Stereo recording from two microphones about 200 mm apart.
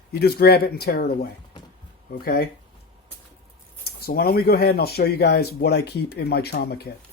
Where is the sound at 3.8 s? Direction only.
50° left (ahead or behind).